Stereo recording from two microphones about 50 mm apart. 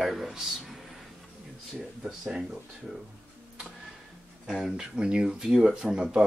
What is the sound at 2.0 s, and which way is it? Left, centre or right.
Speech, centre.